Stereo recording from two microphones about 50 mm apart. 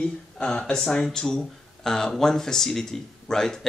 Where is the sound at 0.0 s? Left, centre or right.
Centre.